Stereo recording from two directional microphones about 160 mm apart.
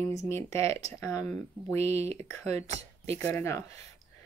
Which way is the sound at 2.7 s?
40° right (ahead or behind).